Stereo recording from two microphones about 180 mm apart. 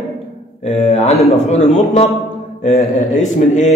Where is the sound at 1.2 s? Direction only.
40° left (ahead or behind).